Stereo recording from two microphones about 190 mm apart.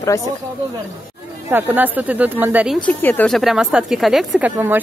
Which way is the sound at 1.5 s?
10° right (ahead or behind).